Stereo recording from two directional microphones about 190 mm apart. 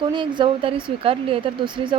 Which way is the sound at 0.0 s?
25° right (ahead or behind).